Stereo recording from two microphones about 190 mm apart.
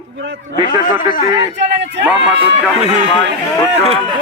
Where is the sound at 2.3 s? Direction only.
30° right (ahead or behind).